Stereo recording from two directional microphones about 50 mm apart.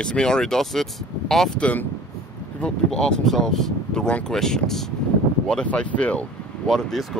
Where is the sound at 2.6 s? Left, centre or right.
Centre.